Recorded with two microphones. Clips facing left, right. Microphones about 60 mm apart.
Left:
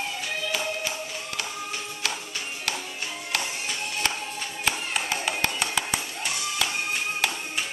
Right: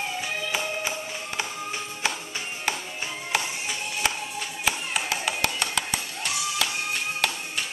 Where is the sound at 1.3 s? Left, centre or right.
Right.